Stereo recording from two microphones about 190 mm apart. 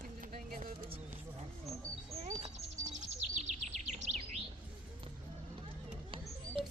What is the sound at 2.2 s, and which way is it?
Bird, 40° right (ahead or behind).